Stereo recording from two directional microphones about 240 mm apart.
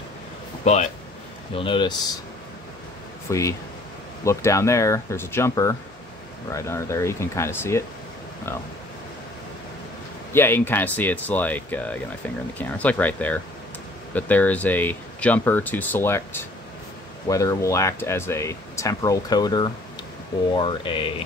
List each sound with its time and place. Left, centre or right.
0.7 s speech: left
3.3 s speech: centre
10.3 s speech: centre